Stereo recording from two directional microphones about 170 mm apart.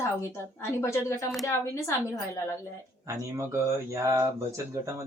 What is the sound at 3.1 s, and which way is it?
Speech, 15° right (ahead or behind).